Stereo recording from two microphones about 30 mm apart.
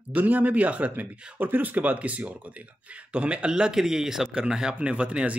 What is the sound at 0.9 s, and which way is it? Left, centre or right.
Speech, right.